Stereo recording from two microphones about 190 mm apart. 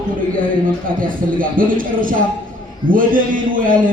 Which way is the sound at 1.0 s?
45° right (ahead or behind).